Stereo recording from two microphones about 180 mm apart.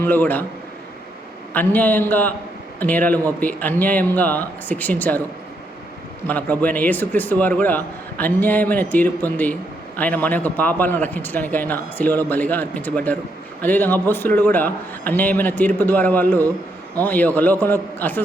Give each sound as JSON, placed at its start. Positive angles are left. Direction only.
{"t": 0.0, "sound": "a man's voice", "side_deg": 10}
{"t": 1.5, "sound": "a man's voice", "side_deg": 10}
{"t": 6.2, "sound": "a man's voice", "side_deg": 10}